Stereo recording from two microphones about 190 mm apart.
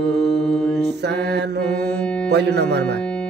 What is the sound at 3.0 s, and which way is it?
Music, 5° left (ahead or behind).